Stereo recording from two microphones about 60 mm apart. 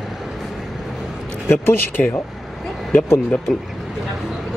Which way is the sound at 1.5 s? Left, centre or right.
Left.